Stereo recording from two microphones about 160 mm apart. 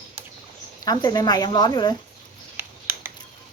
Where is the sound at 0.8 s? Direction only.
25° left (ahead or behind).